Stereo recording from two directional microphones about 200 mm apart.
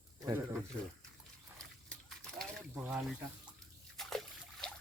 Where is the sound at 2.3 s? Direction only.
5° right (ahead or behind).